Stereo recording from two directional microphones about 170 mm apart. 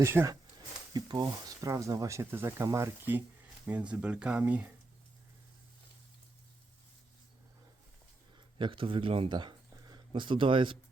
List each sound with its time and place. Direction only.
0.0 s speech: 15° right (ahead or behind)
8.5 s speech: 30° right (ahead or behind)